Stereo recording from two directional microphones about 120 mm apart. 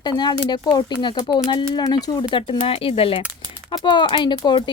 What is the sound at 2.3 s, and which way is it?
Speech, 50° left (ahead or behind).